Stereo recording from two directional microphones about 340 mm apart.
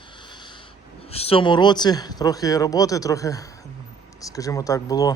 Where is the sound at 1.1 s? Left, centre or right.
Centre.